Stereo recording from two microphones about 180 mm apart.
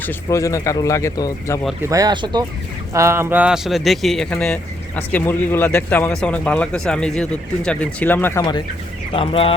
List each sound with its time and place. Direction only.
0.0 s speech: 15° left (ahead or behind)
1.8 s speech: 20° right (ahead or behind); by 8.6 s 20° left (ahead or behind)
9.1 s speech: 30° left (ahead or behind)